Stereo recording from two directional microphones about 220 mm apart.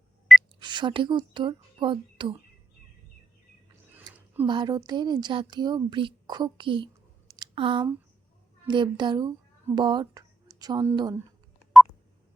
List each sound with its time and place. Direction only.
0.6 s speech: 20° right (ahead or behind)
3.9 s a sound: 10° right (ahead or behind)
4.4 s a child's voice: 20° right (ahead or behind)